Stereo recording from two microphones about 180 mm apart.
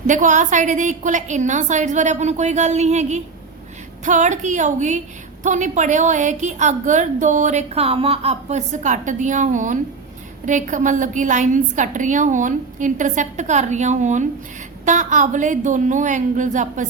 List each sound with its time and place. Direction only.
0.1 s a woman's voice: 45° right (ahead or behind)